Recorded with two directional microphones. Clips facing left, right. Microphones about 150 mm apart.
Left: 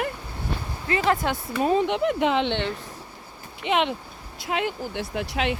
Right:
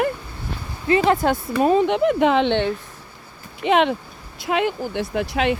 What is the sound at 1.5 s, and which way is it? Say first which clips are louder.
Speech: right 4 dB; 60° right (ahead or behind).